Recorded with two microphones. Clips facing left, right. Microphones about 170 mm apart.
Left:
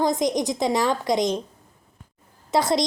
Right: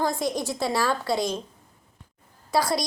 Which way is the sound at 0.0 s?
20° left (ahead or behind).